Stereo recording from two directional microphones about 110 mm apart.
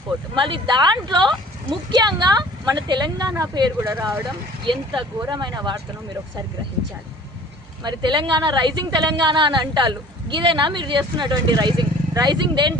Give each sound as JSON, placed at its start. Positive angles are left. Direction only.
{"t": 0.3, "sound": "a woman's voice", "side_deg": -50}
{"t": 4.6, "sound": "a woman's voice", "side_deg": -45}
{"t": 7.9, "sound": "a woman's voice", "side_deg": -45}